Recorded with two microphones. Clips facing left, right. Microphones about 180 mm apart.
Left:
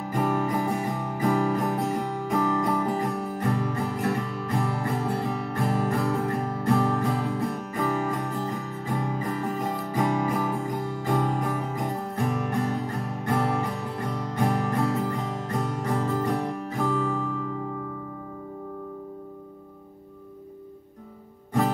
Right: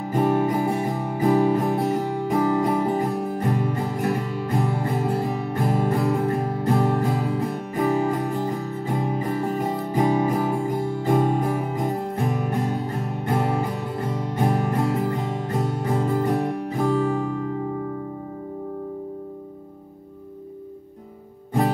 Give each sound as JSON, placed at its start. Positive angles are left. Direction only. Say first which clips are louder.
{"t": 0.1, "sound": "music", "louder": "right 5 dB", "side_deg": -25}
{"t": 16.3, "sound": "music", "louder": "right 4 dB", "side_deg": -15}